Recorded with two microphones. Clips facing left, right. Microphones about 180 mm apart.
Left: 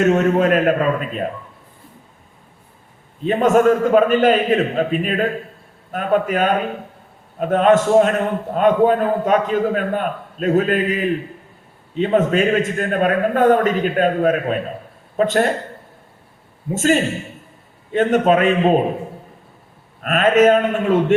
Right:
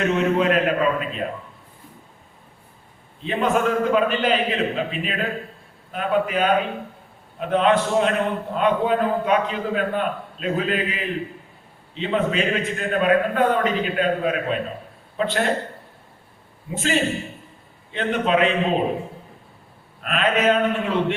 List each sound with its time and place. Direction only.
0.0 s a man's voice: 45° left (ahead or behind)
3.2 s a man's voice: 45° left (ahead or behind)
16.7 s a man's voice: 45° left (ahead or behind)
20.0 s a man's voice: 45° left (ahead or behind)